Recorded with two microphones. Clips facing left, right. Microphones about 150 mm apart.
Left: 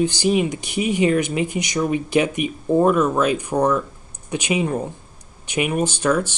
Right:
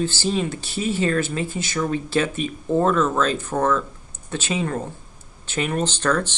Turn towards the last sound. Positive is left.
turn(degrees=10)  # may be behind; listen again after turning